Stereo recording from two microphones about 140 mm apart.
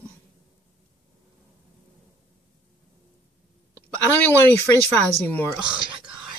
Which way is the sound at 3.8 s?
15° left (ahead or behind).